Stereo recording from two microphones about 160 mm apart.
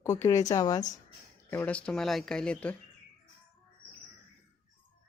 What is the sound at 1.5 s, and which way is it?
A woman's voice, 10° left (ahead or behind).